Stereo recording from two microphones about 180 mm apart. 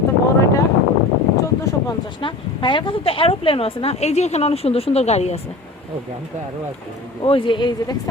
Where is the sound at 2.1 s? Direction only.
25° left (ahead or behind).